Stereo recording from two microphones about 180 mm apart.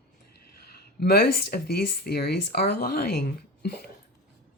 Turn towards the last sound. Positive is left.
turn(degrees=65)  # may be behind; listen again after turning